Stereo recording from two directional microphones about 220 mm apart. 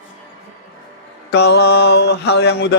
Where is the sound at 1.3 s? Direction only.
50° left (ahead or behind).